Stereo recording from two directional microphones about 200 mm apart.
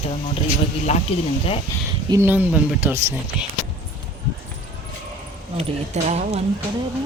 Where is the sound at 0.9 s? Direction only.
35° left (ahead or behind).